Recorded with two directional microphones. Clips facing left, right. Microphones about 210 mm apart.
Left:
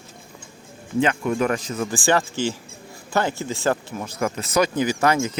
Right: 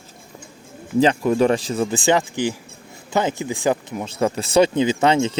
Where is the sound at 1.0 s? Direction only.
30° right (ahead or behind); by 4.1 s 15° right (ahead or behind).